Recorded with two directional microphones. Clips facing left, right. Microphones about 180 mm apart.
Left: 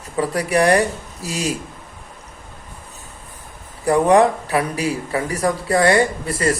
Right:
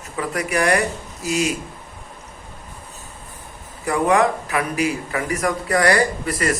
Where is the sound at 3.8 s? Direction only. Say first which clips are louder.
Left 4 dB; 35° left (ahead or behind).